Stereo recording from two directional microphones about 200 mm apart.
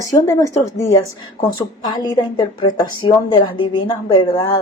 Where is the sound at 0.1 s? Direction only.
15° left (ahead or behind).